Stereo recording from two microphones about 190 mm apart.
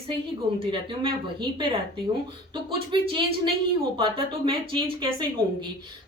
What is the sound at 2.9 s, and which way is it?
A woman's voice, 25° right (ahead or behind).